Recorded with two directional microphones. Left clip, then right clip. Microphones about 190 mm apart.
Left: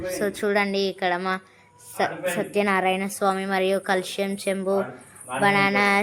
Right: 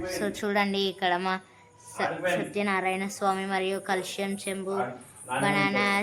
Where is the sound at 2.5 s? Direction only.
25° left (ahead or behind).